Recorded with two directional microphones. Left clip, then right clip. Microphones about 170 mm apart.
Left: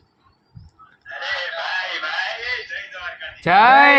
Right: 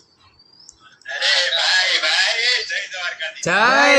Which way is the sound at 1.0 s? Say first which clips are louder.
Right 8 dB; 10° right (ahead or behind).